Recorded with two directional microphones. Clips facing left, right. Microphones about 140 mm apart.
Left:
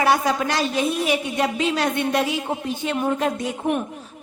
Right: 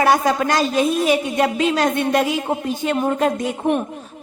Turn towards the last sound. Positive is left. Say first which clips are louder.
# right 4 dB
turn(degrees=-50)  # may be behind; listen again after turning